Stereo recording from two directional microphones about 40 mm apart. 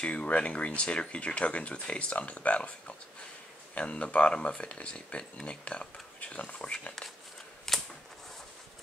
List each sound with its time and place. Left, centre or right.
0.0 s speech: left
6.1 s speech: left
7.7 s typewriter: centre